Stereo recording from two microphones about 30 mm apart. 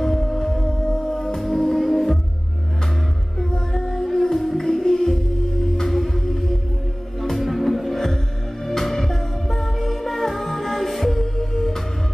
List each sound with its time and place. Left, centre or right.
0.0 s music: centre
0.7 s music: left
1.1 s music: centre
3.7 s music: centre